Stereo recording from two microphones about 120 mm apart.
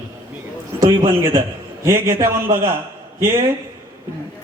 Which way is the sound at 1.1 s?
20° right (ahead or behind).